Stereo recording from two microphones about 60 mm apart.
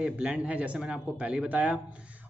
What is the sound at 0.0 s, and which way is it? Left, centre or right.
A man's voice, centre.